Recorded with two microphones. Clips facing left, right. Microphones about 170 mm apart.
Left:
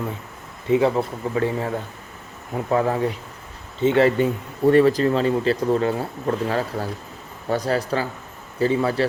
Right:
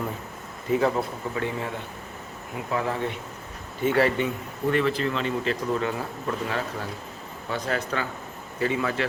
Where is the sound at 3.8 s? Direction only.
25° left (ahead or behind).